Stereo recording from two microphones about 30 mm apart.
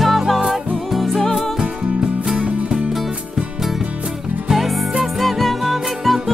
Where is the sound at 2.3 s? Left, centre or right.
Right.